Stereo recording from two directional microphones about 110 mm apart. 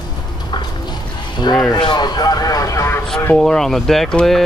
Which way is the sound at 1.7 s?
40° left (ahead or behind).